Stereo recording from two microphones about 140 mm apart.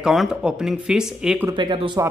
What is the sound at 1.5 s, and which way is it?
Speech, 35° right (ahead or behind).